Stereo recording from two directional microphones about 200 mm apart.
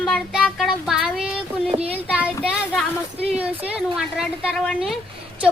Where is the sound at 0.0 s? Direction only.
Centre (ahead or behind).